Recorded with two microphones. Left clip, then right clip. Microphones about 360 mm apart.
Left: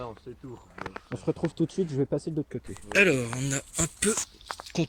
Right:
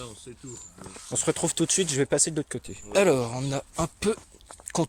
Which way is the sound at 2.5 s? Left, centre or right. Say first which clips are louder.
Right 1 dB; centre.